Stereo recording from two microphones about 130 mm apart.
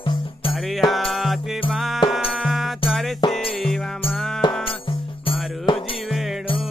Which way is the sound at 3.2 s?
35° left (ahead or behind).